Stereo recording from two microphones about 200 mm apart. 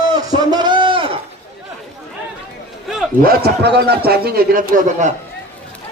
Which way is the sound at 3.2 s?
50° right (ahead or behind).